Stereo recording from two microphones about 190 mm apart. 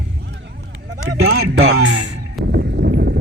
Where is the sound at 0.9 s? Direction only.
80° right.